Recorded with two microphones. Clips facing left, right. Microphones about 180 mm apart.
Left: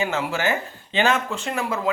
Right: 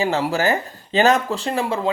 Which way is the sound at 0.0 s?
35° right (ahead or behind).